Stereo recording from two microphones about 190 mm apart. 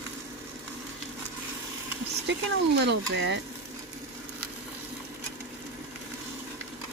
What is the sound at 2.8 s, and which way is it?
Speech, 65° right (ahead or behind).